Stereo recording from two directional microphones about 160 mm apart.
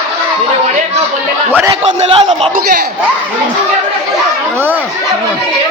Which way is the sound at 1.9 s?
35° right (ahead or behind).